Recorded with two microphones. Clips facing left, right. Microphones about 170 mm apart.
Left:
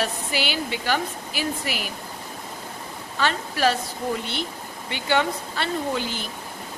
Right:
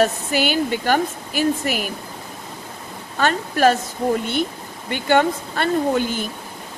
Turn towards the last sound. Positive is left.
turn(degrees=-50)  # may be behind; listen again after turning